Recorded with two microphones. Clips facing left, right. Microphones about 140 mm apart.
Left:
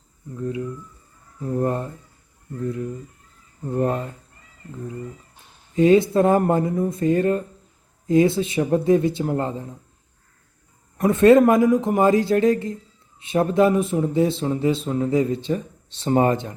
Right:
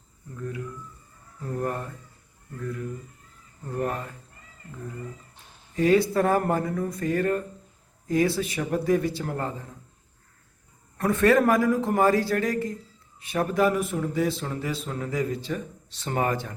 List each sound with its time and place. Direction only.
0.3 s a man's voice: 20° left (ahead or behind)
5.7 s a man's voice: 20° left (ahead or behind)
10.9 s a man's voice: 20° left (ahead or behind)